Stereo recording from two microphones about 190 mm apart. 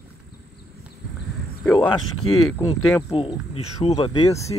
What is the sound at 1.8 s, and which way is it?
Speech, 25° left (ahead or behind).